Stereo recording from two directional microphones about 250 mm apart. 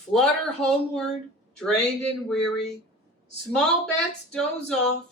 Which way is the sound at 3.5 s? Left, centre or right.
Centre.